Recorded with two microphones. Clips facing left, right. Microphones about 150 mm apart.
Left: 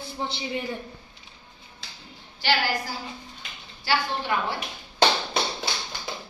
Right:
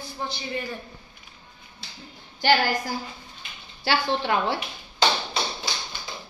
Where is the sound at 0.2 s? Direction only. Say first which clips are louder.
Left 1 dB; 20° left (ahead or behind).